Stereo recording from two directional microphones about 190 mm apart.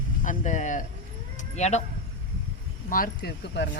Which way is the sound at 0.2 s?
40° left (ahead or behind).